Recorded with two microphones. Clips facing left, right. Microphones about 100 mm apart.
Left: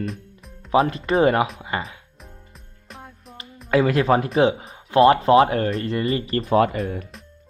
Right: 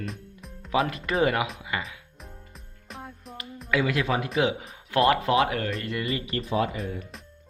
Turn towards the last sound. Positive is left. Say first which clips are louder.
# left 8 dB
turn(degrees=55)  # may be behind; listen again after turning